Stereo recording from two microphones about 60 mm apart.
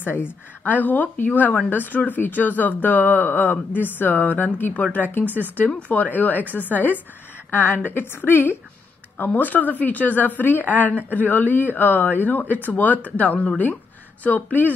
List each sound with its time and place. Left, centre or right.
0.0 s a woman's voice: left